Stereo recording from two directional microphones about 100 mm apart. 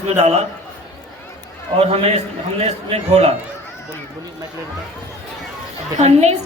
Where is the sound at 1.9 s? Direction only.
90° right.